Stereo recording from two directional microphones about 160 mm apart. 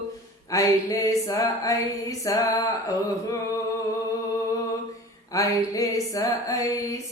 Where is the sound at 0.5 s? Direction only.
20° left (ahead or behind).